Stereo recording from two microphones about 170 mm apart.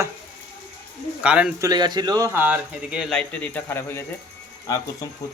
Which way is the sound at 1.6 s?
25° right (ahead or behind).